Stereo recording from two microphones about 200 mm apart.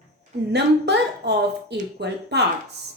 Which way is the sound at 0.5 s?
55° right (ahead or behind).